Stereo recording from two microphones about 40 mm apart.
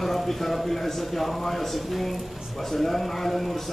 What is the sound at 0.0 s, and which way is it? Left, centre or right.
A man's voice, centre.